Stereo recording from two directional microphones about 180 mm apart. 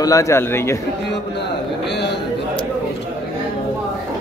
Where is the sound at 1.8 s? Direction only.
70° left (ahead or behind).